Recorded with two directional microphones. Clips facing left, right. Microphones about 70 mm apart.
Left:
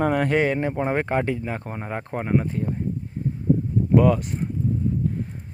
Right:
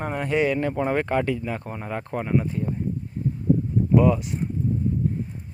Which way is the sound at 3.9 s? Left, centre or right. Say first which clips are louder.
Left 1 dB; left.